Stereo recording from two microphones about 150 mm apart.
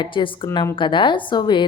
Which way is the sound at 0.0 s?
35° left (ahead or behind).